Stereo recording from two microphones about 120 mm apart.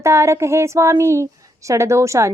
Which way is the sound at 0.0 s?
25° right (ahead or behind).